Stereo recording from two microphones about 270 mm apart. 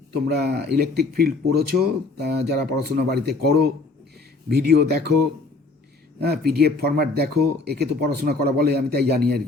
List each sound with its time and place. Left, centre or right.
0.3 s speech: right
6.1 s speech: right